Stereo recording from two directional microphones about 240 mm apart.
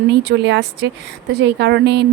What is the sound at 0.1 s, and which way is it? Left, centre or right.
Speech, right.